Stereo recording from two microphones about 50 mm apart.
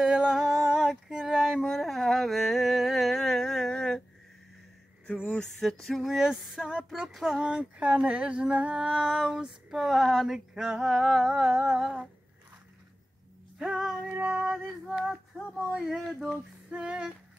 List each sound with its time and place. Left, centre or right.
0.0 s female singing: centre
1.1 s a sound: centre
5.0 s a sound: left
5.6 s speech: centre
6.0 s female singing: centre
6.9 s speech: centre
7.2 s female singing: centre
7.5 s humming: right
8.1 s female singing: right; by 11.2 s centre
11.2 s humming: right
13.6 s music: centre
14.1 s female singing: right
15.8 s speech: centre
16.7 s humming: right